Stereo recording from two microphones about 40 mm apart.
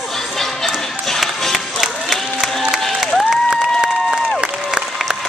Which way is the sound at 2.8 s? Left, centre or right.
Centre.